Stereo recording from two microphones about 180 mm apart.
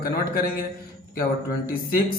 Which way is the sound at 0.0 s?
55° left (ahead or behind).